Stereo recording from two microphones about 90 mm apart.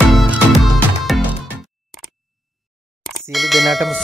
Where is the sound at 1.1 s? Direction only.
Centre (ahead or behind).